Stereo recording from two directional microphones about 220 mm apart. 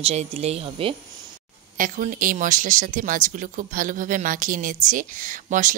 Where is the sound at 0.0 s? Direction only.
30° right (ahead or behind).